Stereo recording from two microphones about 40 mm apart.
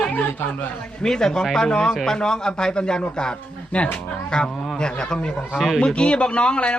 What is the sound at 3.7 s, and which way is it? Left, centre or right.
Speech, left.